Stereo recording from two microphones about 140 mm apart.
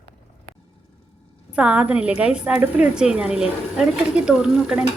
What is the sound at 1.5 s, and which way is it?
A woman's voice, 10° right (ahead or behind).